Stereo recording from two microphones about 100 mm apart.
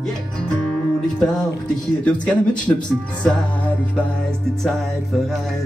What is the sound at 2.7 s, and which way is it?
Speech, 25° left (ahead or behind).